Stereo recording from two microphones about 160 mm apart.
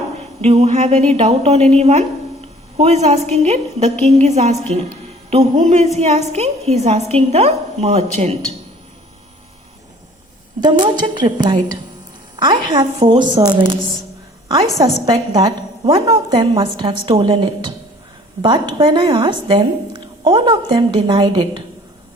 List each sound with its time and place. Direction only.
0.4 s a woman's voice: 40° right (ahead or behind)
10.6 s a woman's voice: 25° right (ahead or behind)
15.0 s a woman's voice: 25° right (ahead or behind)